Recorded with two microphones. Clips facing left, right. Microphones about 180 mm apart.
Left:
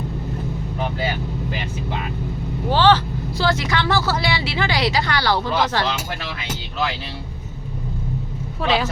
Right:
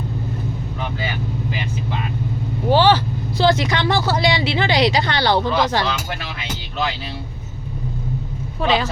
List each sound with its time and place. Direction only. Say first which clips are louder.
2.6 s speech: right 1 dB; 15° right (ahead or behind)
8.6 s speech: right 1 dB; centre (ahead or behind)